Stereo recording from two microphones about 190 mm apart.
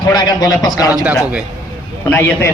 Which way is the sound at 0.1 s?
20° left (ahead or behind).